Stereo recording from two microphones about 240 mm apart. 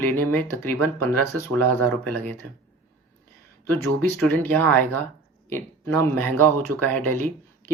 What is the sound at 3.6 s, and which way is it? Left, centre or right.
Speech, right.